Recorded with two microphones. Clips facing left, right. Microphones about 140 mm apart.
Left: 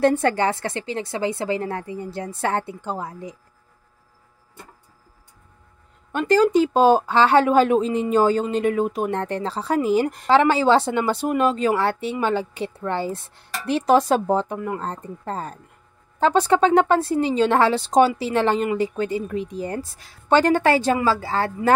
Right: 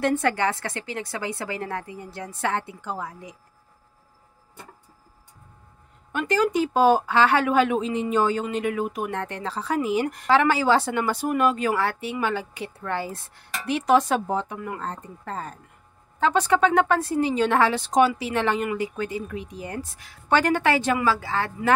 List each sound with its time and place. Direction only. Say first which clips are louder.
0.0 s a woman's voice: left 4 dB; 30° left (ahead or behind)
6.1 s a woman's voice: left 6 dB; 35° left (ahead or behind)